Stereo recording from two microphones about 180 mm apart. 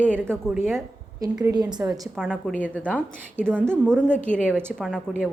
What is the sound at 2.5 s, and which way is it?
A woman's voice, 10° left (ahead or behind).